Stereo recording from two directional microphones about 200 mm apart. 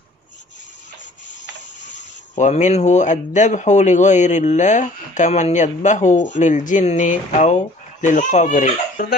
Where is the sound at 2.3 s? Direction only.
35° left (ahead or behind).